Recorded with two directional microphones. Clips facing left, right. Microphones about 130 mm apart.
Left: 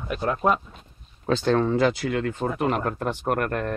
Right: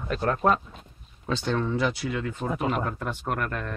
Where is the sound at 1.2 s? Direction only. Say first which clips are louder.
Left 6 dB; 45° left (ahead or behind).